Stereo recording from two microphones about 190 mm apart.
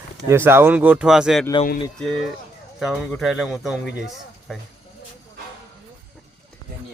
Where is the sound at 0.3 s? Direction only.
10° right (ahead or behind).